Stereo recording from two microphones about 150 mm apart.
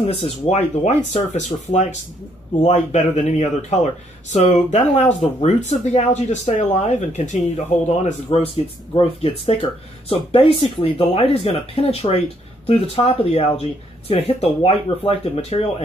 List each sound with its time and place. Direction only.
0.0 s speech: 40° left (ahead or behind)